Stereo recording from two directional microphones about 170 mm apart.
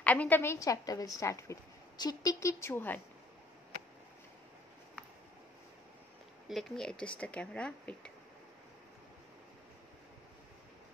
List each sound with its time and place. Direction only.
0.0 s a woman's voice: 10° left (ahead or behind)
6.5 s a woman's voice: 5° left (ahead or behind)